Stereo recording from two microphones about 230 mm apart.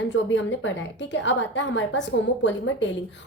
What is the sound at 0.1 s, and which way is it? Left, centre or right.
A woman's voice, left.